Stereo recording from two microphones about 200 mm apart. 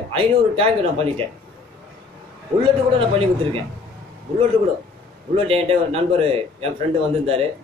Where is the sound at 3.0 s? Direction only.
30° right (ahead or behind).